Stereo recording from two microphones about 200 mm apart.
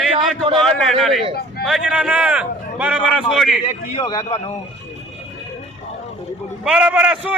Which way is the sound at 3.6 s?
25° left (ahead or behind).